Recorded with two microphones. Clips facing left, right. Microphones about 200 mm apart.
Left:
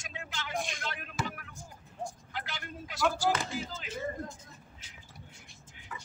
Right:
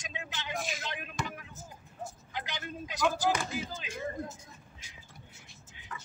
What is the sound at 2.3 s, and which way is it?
Speech, 20° right (ahead or behind).